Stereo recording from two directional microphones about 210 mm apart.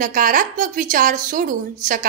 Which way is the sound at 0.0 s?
40° right (ahead or behind).